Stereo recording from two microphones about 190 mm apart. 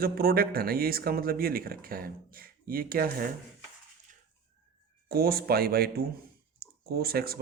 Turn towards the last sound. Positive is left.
turn(degrees=-55)  # may be behind; listen again after turning